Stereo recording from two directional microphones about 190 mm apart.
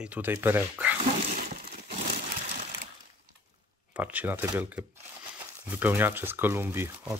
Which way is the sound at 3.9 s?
10° right (ahead or behind).